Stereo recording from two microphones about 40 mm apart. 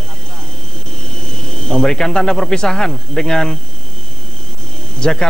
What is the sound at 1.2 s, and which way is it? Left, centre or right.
Speech, centre.